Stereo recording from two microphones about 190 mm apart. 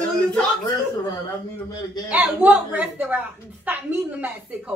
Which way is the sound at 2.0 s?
10° right (ahead or behind).